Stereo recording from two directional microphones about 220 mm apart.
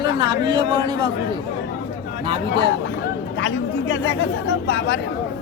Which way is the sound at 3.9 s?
55° left (ahead or behind).